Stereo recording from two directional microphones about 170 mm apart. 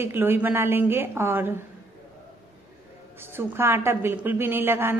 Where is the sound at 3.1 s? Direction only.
15° right (ahead or behind).